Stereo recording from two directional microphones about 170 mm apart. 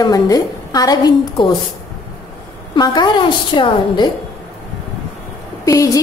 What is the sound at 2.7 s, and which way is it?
A woman's voice, 25° left (ahead or behind).